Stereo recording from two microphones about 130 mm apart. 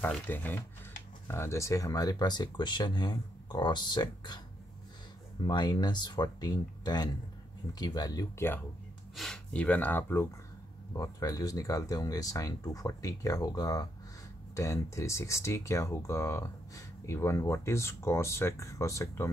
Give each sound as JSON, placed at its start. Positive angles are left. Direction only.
{"t": 0.0, "sound": "speech", "side_deg": 15}
{"t": 5.4, "sound": "speech", "side_deg": 35}
{"t": 9.1, "sound": "speech", "side_deg": 5}
{"t": 10.9, "sound": "speech", "side_deg": 25}